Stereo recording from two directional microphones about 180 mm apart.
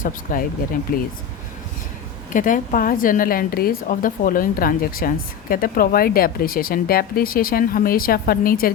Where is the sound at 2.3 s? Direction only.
45° left (ahead or behind).